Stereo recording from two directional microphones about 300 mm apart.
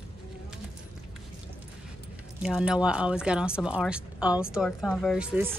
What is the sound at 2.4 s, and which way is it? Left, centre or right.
Speech, centre.